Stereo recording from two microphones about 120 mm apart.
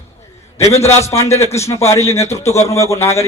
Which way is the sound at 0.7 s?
65° left (ahead or behind).